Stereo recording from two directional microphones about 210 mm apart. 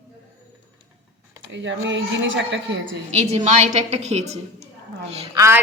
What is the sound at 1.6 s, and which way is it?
A child's voice, 60° right (ahead or behind).